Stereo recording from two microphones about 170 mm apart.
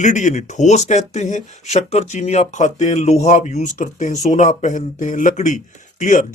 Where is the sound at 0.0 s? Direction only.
45° left (ahead or behind).